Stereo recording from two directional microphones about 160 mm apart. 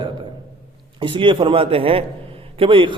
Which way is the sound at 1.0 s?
30° right (ahead or behind).